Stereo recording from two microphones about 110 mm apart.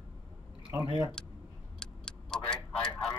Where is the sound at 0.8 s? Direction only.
40° right (ahead or behind).